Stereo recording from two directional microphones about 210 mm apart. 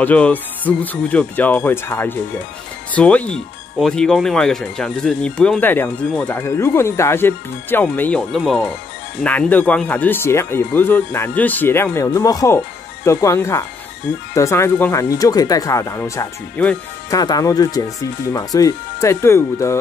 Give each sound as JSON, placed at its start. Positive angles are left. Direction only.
{"t": 0.0, "sound": "speech", "side_deg": 5}